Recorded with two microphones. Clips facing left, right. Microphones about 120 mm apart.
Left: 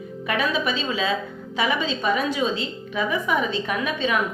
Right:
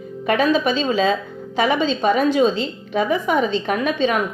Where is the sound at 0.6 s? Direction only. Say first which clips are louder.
Right 6 dB; 30° right (ahead or behind).